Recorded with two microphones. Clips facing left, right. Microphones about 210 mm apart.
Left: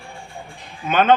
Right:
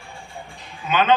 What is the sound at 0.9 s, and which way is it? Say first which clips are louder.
Speech: left 3 dB; 50° left (ahead or behind).